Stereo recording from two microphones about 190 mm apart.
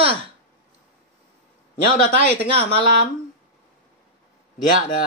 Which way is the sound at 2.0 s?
45° left (ahead or behind).